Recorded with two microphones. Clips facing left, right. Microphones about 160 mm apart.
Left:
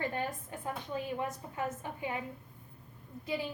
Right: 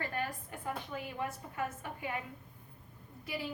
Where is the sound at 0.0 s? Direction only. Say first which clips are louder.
Left 3 dB; 20° left (ahead or behind).